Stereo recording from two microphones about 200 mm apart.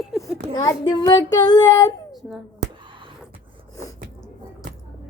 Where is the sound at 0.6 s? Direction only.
20° left (ahead or behind).